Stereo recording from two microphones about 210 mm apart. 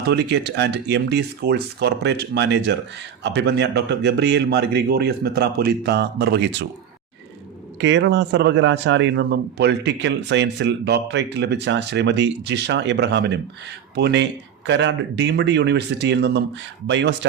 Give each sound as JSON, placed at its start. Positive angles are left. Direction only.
{"t": 0.1, "sound": "speech", "side_deg": -55}
{"t": 7.8, "sound": "speech", "side_deg": -60}